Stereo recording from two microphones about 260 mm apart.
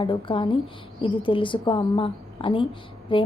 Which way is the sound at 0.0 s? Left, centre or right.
Centre.